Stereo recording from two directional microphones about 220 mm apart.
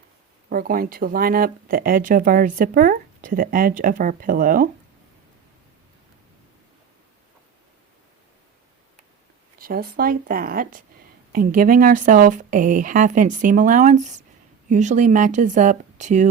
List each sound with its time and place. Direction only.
0.5 s speech: 40° right (ahead or behind)
9.6 s speech: 40° right (ahead or behind)